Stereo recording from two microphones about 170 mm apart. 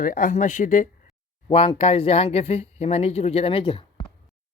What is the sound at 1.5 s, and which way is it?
Speech, 35° left (ahead or behind).